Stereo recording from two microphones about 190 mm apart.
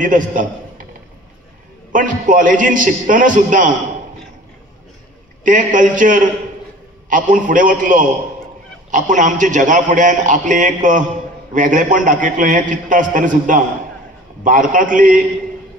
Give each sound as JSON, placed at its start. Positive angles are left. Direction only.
{"t": 0.0, "sound": "a man's voice", "side_deg": -45}
{"t": 1.9, "sound": "a man's voice", "side_deg": -45}
{"t": 5.4, "sound": "a man's voice", "side_deg": -45}